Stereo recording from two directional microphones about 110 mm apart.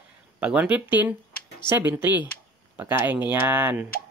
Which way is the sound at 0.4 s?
10° right (ahead or behind).